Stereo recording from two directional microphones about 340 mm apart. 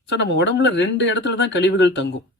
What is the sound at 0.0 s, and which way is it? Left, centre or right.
Speech, left.